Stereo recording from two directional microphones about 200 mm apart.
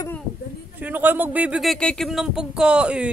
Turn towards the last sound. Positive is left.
turn(degrees=-5)  # may be behind; listen again after turning